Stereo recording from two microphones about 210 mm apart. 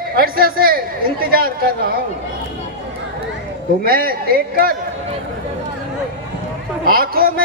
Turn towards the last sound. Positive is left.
turn(degrees=-45)  # may be behind; listen again after turning